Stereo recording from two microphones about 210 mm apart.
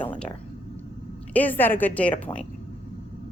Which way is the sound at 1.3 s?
10° left (ahead or behind).